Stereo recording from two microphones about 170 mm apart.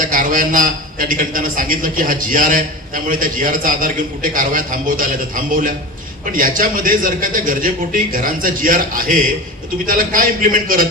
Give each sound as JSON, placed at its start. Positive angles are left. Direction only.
{"t": 0.0, "sound": "a man's voice", "side_deg": -55}